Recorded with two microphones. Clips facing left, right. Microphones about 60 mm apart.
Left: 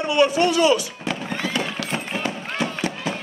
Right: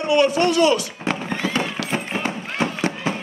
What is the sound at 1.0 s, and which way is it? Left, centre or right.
Music, right.